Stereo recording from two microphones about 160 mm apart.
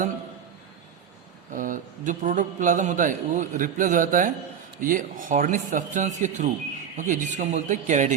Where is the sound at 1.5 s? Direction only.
55° right (ahead or behind).